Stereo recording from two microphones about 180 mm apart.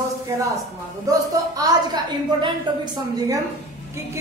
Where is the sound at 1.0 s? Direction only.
20° right (ahead or behind).